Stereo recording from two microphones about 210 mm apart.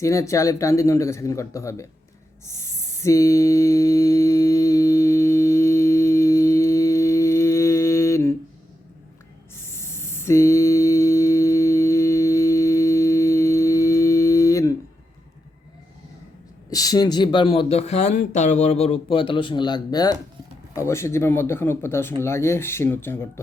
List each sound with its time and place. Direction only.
0.0 s speech: 15° left (ahead or behind)
2.5 s mantra: 15° left (ahead or behind)
9.8 s mantra: 10° left (ahead or behind)
16.6 s speech: 15° left (ahead or behind)